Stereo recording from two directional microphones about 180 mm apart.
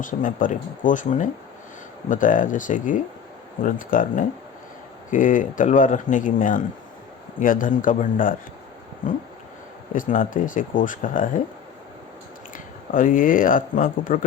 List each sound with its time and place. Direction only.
0.0 s speech: 45° left (ahead or behind)
9.9 s speech: 50° left (ahead or behind)
12.5 s speech: 50° left (ahead or behind)